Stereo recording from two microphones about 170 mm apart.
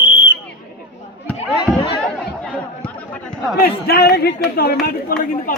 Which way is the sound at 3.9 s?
65° left (ahead or behind).